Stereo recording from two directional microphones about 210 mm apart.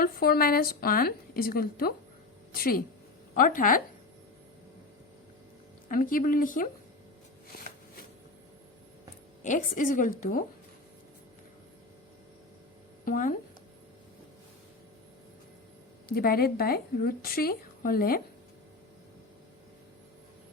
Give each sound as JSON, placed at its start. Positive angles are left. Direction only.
{"t": 0.0, "sound": "a woman's voice", "side_deg": 45}
{"t": 5.9, "sound": "a woman's voice", "side_deg": 40}
{"t": 9.4, "sound": "a woman's voice", "side_deg": 35}
{"t": 13.1, "sound": "speech", "side_deg": 40}
{"t": 16.0, "sound": "a woman's voice", "side_deg": 45}